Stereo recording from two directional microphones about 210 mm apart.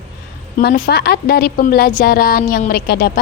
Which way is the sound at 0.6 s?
50° left (ahead or behind).